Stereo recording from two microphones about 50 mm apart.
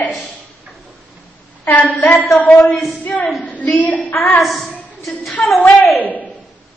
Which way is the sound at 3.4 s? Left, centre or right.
Left.